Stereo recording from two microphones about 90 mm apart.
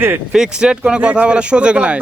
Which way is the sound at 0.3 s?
5° right (ahead or behind).